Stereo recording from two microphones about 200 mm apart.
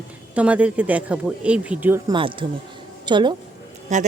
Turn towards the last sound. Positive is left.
turn(degrees=-35)  # may be behind; listen again after turning